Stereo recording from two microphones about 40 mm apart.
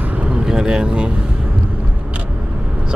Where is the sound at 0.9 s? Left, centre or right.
Right.